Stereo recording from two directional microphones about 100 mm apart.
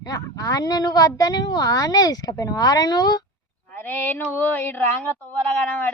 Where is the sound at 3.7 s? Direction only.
20° left (ahead or behind).